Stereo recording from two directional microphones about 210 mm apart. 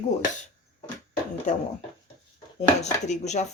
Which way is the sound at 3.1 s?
35° left (ahead or behind).